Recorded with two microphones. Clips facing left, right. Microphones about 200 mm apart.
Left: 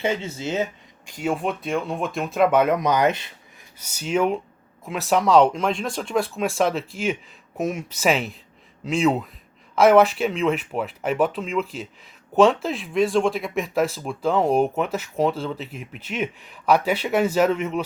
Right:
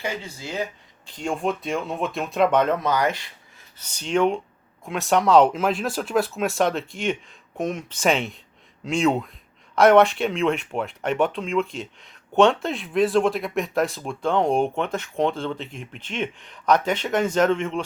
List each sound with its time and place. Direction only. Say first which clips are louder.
0.0 s speech: left 6 dB; 25° left (ahead or behind)
1.0 s speech: left 1 dB; 10° left (ahead or behind)
3.8 s speech: right 1 dB; 10° left (ahead or behind)